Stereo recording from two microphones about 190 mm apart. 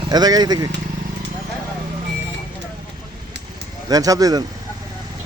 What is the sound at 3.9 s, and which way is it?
Speech, 20° right (ahead or behind).